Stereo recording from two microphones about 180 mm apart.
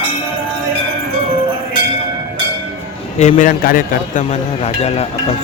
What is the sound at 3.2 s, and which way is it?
Speech, 40° left (ahead or behind).